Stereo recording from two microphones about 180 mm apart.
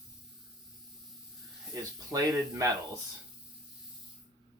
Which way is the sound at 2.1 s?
20° right (ahead or behind).